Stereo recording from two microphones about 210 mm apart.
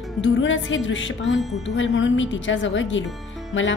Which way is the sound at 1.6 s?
60° left (ahead or behind).